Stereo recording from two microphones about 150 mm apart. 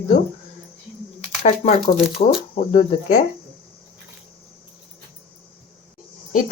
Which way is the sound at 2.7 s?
55° left (ahead or behind).